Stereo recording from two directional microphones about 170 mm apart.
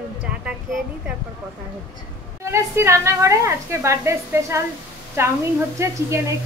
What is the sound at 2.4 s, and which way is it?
A woman's voice, 15° right (ahead or behind).